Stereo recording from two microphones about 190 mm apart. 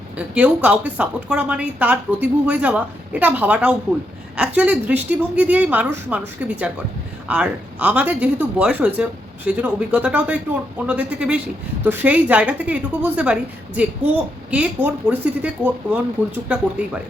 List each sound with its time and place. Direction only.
0.3 s speech: 5° right (ahead or behind)